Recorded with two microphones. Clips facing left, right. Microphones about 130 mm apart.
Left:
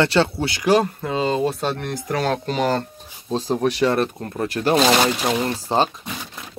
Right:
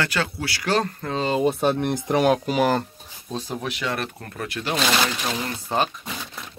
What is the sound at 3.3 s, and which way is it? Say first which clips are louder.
Speech: left 9 dB; 35° left (ahead or behind).